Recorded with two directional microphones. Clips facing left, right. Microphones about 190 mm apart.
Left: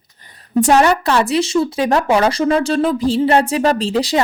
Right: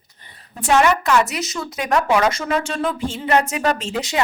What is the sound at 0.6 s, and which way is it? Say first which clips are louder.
Speech: left 4 dB; 40° left (ahead or behind).